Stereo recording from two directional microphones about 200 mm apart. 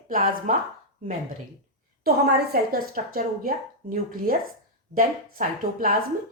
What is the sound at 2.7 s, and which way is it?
Speech, 45° right (ahead or behind).